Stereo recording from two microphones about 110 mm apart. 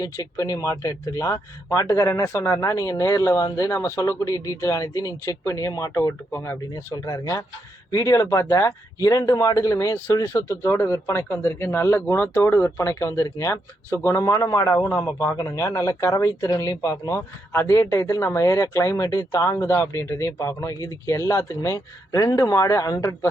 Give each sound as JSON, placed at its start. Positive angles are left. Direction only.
{"t": 0.0, "sound": "speech", "side_deg": 35}